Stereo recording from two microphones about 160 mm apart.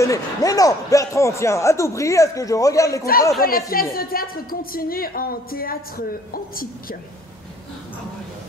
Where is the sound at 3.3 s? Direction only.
65° left (ahead or behind).